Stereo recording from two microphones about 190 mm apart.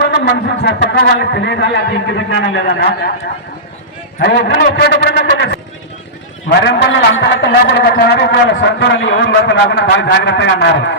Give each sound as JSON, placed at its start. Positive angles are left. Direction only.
{"t": 0.6, "sound": "a man's voice", "side_deg": 55}
{"t": 4.2, "sound": "a man's voice", "side_deg": 65}